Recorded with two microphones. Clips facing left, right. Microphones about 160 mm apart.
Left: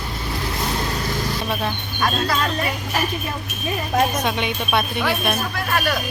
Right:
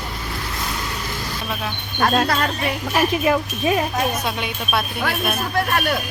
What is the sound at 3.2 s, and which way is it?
Speech, 80° right.